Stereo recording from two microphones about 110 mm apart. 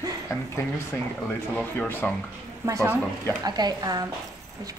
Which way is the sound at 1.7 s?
15° left (ahead or behind).